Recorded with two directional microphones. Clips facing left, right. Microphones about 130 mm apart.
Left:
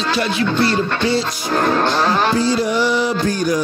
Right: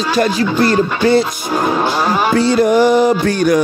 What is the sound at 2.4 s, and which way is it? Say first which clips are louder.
Music: right 6 dB; 60° right (ahead or behind).